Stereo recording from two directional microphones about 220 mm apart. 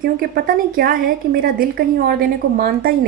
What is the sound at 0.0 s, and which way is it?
A woman's voice, 40° right (ahead or behind).